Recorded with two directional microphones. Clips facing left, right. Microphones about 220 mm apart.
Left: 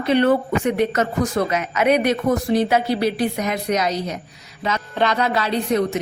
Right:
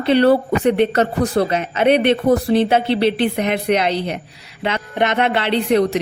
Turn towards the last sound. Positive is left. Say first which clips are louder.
# right 4 dB
turn(degrees=-35)  # may be behind; listen again after turning